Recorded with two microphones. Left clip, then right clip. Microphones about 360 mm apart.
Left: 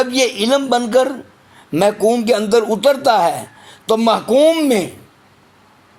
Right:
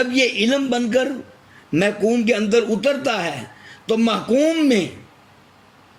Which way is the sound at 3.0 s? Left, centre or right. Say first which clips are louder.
Left 9 dB; centre.